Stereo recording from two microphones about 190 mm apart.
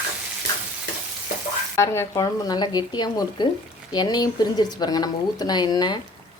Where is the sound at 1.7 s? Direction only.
15° left (ahead or behind).